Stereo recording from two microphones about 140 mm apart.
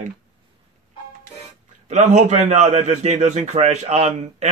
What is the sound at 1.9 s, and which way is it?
A man's voice, 60° right (ahead or behind).